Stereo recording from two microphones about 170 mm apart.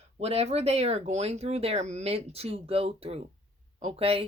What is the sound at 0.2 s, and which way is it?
Speech, 35° right (ahead or behind).